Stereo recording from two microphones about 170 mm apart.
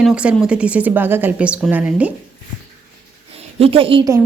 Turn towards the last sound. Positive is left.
turn(degrees=-30)  # may be behind; listen again after turning